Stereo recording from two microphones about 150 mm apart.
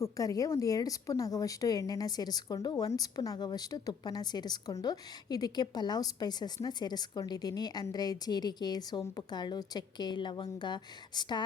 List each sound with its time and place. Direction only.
0.0 s a woman's voice: 25° left (ahead or behind)